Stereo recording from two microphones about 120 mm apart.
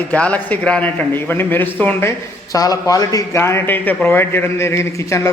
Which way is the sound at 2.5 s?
30° left (ahead or behind).